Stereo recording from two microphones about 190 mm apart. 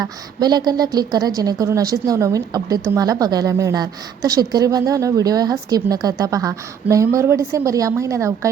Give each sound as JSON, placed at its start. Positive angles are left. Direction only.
{"t": 0.0, "sound": "a woman's voice", "side_deg": -20}